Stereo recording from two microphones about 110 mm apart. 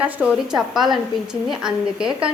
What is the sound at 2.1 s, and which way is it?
Speech, 50° right (ahead or behind).